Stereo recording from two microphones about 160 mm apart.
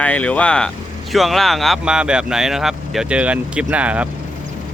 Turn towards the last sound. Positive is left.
turn(degrees=-10)  # may be behind; listen again after turning